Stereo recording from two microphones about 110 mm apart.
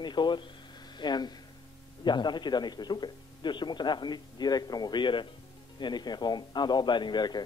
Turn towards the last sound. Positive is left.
turn(degrees=40)  # may be behind; listen again after turning